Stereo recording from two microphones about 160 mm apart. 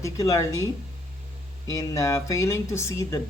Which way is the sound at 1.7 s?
20° left (ahead or behind).